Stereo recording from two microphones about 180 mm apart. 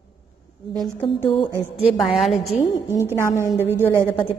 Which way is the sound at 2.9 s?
15° right (ahead or behind).